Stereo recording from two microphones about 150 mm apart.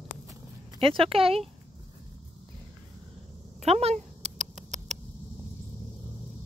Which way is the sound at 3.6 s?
45° right (ahead or behind).